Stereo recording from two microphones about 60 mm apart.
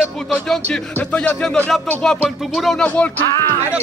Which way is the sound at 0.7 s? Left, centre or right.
Left.